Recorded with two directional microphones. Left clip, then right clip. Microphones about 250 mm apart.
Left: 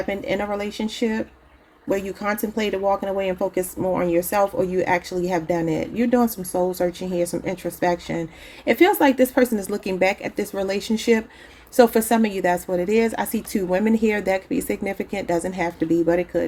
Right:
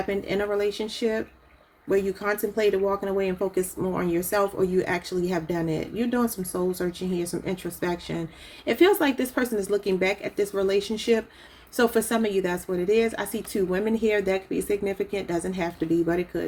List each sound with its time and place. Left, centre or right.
0.1 s speech: left